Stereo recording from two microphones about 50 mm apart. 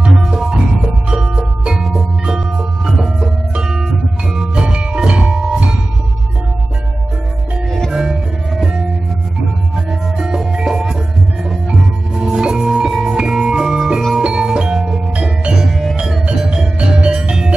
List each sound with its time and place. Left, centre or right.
0.0 s music: centre
7.9 s organ: centre
10.1 s music: centre
12.1 s music: centre
15.6 s music: centre
16.3 s music: right